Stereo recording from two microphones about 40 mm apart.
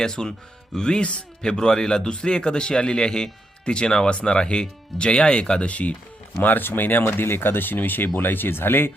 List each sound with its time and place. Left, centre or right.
0.0 s speech: centre
1.0 s speech: left
1.5 s speech: centre; by 6.0 s left
6.4 s speech: left